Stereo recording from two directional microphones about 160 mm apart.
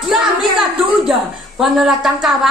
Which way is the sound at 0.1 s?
Centre (ahead or behind).